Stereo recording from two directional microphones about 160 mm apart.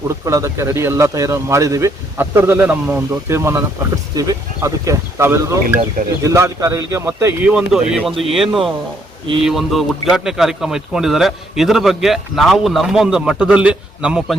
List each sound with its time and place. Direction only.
0.3 s a man's voice: 20° right (ahead or behind)